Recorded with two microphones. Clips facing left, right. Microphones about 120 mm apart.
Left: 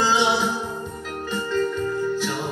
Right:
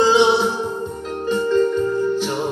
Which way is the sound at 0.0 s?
20° right (ahead or behind).